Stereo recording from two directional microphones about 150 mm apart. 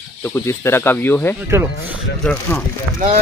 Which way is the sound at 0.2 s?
15° left (ahead or behind).